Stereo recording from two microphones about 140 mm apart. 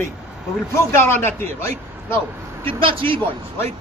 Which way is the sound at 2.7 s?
40° right (ahead or behind).